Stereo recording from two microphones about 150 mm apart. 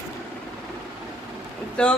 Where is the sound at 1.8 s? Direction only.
5° left (ahead or behind).